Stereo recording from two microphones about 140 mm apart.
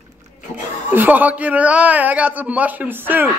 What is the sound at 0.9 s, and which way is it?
A man's voice, 15° right (ahead or behind).